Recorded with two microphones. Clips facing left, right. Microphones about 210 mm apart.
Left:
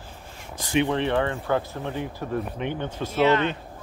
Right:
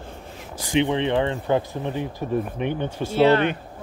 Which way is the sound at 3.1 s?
30° right (ahead or behind).